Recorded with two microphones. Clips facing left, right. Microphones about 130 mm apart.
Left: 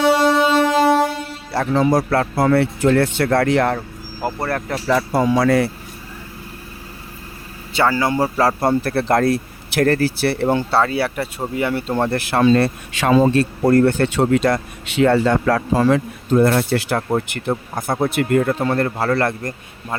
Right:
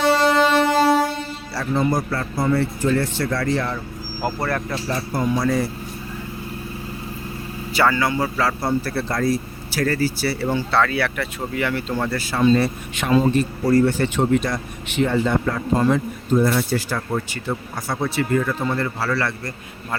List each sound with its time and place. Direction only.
0.0 s music: 10° left (ahead or behind)
1.7 s speech: 90° left; by 3.8 s 60° left (ahead or behind)
4.4 s speech: 35° left (ahead or behind)
4.9 s speech: 90° left; by 5.7 s 75° left (ahead or behind)
7.8 s a man's voice: 20° left (ahead or behind)
8.1 s speech: 40° left (ahead or behind)
10.7 s speech: 30° left (ahead or behind)
12.1 s speech: 60° left (ahead or behind)
17.7 s speech: 50° left (ahead or behind)